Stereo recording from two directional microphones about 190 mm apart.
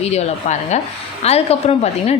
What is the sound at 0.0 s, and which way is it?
A woman's voice, 35° left (ahead or behind).